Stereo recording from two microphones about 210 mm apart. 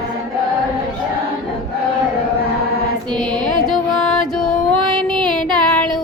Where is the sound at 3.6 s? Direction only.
5° left (ahead or behind).